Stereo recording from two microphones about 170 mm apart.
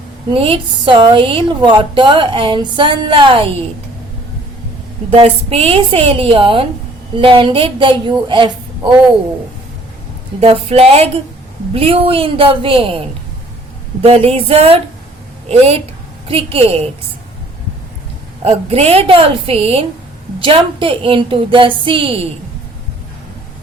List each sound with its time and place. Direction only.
0.3 s a woman's voice: 35° right (ahead or behind)
5.1 s a woman's voice: 35° right (ahead or behind)
10.4 s a woman's voice: 35° right (ahead or behind)
14.0 s a woman's voice: 35° right (ahead or behind)
18.4 s a woman's voice: 35° right (ahead or behind)